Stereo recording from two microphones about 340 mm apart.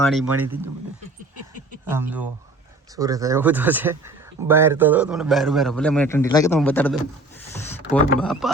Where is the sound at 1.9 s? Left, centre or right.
Centre.